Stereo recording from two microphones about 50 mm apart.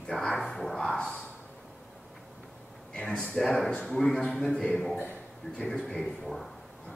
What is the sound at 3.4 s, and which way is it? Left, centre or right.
A man's voice, centre.